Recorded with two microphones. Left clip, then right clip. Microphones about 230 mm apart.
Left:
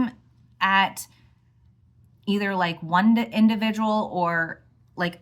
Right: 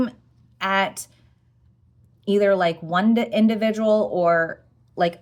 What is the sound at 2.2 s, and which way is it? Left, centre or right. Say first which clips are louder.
Speech: right 7 dB; centre.